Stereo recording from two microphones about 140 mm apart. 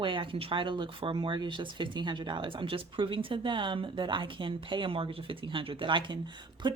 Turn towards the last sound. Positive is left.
turn(degrees=-35)  # may be behind; listen again after turning